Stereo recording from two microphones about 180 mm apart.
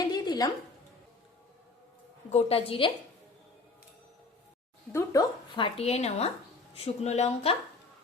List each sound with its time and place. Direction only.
0.0 s a sound: 25° left (ahead or behind)
2.3 s speech: 30° left (ahead or behind)
4.9 s speech: 15° left (ahead or behind)
5.5 s speech: 30° left (ahead or behind)